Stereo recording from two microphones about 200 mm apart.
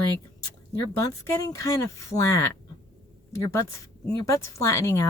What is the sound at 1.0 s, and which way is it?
Speech, 20° left (ahead or behind).